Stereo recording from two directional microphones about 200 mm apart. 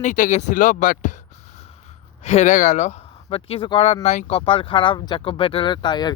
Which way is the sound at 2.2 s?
35° left (ahead or behind).